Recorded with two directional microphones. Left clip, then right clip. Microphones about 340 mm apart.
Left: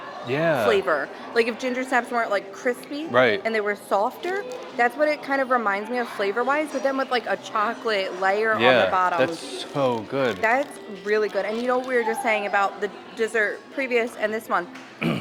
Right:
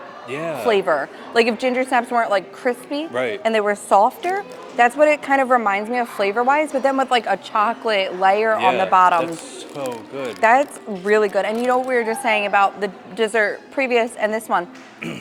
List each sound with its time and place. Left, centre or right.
0.3 s speech: left
0.6 s a woman's voice: right
3.1 s speech: left
3.4 s a woman's voice: right
8.5 s speech: left
8.9 s a woman's voice: right
9.7 s speech: left
10.4 s a woman's voice: right
15.0 s a sound: left